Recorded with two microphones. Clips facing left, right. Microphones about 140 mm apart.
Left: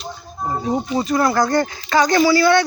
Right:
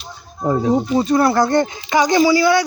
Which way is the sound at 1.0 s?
30° right (ahead or behind).